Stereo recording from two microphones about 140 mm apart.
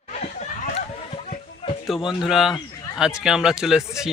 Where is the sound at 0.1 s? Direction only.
60° left (ahead or behind).